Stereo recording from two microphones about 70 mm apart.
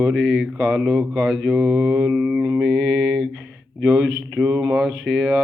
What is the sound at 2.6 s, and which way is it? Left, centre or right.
Mantra, centre.